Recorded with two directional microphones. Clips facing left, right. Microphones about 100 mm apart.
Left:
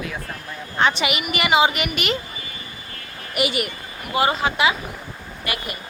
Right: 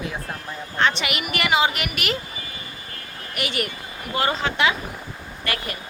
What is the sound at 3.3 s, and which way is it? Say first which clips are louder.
Speech: left 4 dB; 10° left (ahead or behind).